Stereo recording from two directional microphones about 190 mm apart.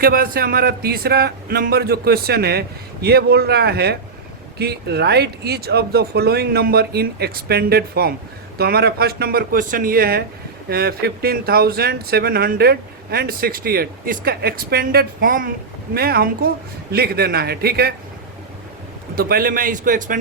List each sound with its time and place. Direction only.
0.0 s speech: 50° right (ahead or behind)
19.1 s speech: 55° right (ahead or behind)